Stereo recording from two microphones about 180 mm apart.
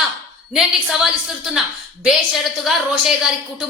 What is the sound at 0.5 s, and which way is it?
A woman's voice, 5° right (ahead or behind).